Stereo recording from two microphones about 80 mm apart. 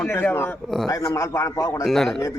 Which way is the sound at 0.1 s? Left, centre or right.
Left.